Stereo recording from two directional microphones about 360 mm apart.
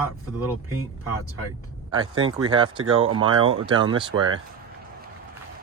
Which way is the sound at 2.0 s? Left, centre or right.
Right.